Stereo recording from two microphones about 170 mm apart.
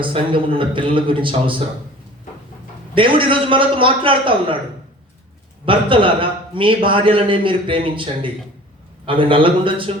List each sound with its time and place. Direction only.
0.0 s a man's voice: 30° right (ahead or behind)
2.9 s a man's voice: 30° right (ahead or behind)
5.6 s a man's voice: 30° right (ahead or behind)